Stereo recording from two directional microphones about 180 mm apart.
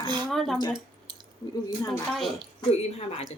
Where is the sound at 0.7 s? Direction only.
25° right (ahead or behind).